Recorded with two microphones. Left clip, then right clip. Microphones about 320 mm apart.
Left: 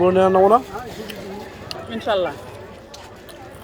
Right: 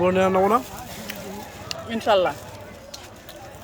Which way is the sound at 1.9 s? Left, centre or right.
Right.